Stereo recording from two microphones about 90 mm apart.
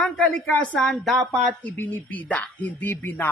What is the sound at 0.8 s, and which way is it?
Speech, centre (ahead or behind).